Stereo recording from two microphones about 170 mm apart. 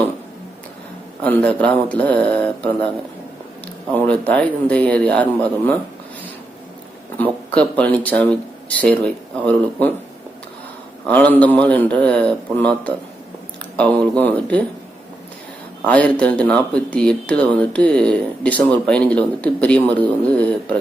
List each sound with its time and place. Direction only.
1.2 s speech: 10° left (ahead or behind)
3.9 s speech: 10° left (ahead or behind)
7.2 s speech: 10° left (ahead or behind)
11.0 s speech: 10° left (ahead or behind)
15.9 s speech: 5° left (ahead or behind)